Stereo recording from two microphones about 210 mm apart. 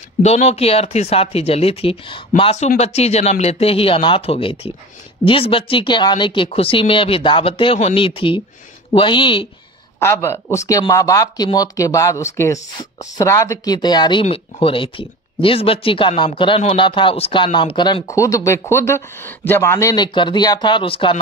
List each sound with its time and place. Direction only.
0.2 s speech: 30° left (ahead or behind)
9.9 s speech: 10° left (ahead or behind)